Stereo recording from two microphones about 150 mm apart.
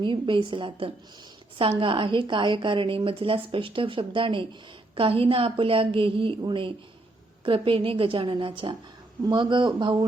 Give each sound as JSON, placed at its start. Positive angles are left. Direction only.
{"t": 0.0, "sound": "a woman's voice", "side_deg": -35}